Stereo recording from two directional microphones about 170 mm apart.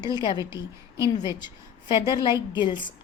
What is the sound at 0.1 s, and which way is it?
Speech, 25° left (ahead or behind).